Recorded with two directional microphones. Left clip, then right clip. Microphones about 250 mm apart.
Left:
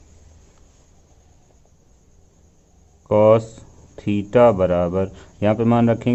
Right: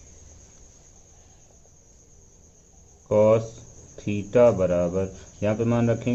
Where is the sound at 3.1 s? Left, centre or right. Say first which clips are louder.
Left 5 dB; left.